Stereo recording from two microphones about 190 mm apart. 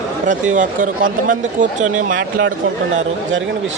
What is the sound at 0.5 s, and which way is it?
Speech, 45° right (ahead or behind).